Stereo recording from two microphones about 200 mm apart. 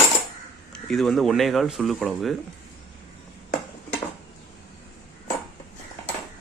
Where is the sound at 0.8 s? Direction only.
Centre (ahead or behind).